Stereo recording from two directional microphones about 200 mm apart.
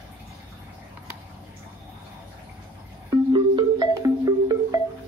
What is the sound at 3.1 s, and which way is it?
Music, 20° right (ahead or behind).